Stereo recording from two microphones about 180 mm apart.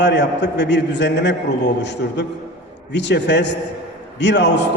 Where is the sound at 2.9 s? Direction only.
75° left (ahead or behind).